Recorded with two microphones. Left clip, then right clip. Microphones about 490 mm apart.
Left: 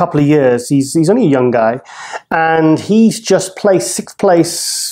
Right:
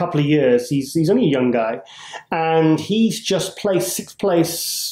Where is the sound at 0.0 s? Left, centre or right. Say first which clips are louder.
Left 7 dB; left.